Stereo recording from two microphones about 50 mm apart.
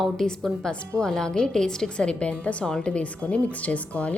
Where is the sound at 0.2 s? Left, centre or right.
Centre.